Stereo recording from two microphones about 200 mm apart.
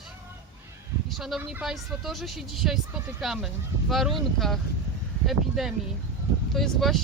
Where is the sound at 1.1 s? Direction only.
Centre (ahead or behind).